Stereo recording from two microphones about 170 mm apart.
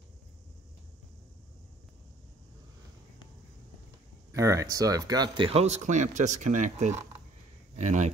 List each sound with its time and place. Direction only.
4.3 s speech: 20° right (ahead or behind); by 8.1 s 45° right (ahead or behind)